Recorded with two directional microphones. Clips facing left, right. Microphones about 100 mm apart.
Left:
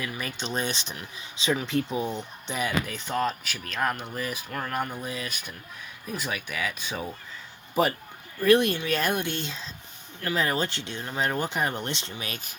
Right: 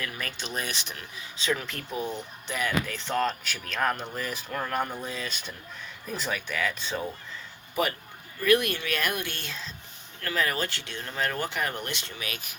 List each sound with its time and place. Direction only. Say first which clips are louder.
0.0 s speech: left 2 dB; 15° left (ahead or behind)
0.4 s speech: left 5 dB; 30° left (ahead or behind); by 7.0 s 10° left (ahead or behind)
7.8 s speech: left 4 dB; 30° left (ahead or behind)